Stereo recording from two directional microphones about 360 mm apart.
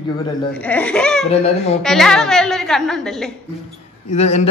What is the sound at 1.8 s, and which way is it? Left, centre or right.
A woman's voice, centre.